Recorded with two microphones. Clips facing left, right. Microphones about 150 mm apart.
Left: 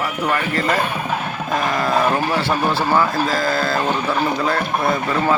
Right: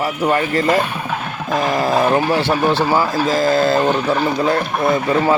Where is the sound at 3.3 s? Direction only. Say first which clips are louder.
Right 5 dB; 25° right (ahead or behind).